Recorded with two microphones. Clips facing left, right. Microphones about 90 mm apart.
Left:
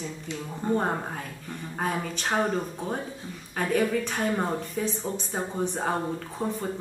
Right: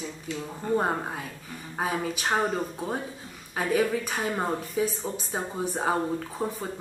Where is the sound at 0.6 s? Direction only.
15° left (ahead or behind).